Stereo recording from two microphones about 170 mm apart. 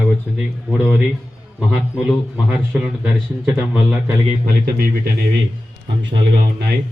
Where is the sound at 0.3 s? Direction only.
10° right (ahead or behind).